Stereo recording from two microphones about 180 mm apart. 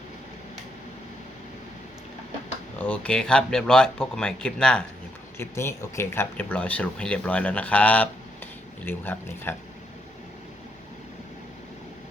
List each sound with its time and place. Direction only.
2.7 s speech: 10° left (ahead or behind)